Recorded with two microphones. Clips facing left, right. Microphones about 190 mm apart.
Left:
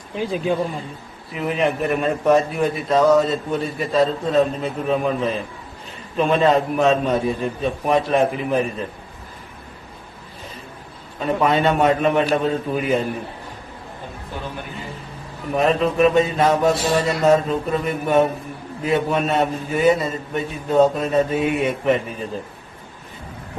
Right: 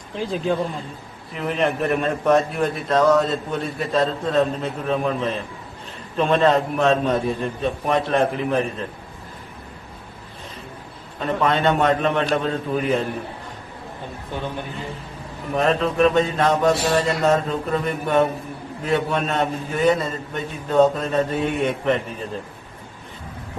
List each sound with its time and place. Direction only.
0.2 s a man's voice: 5° left (ahead or behind)
11.2 s a man's voice: 5° left (ahead or behind)
15.5 s a man's voice: 5° left (ahead or behind)